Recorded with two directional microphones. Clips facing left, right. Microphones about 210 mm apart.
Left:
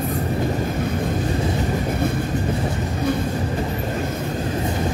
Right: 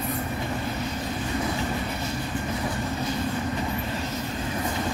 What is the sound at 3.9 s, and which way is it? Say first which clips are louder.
Vehicle: left 6 dB; 55° left (ahead or behind).